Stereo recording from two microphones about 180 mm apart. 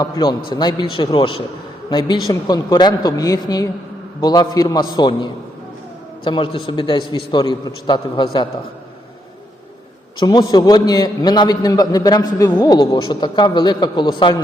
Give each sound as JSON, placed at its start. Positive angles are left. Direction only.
{"t": 0.0, "sound": "a man's voice", "side_deg": 20}
{"t": 10.2, "sound": "a man's voice", "side_deg": 25}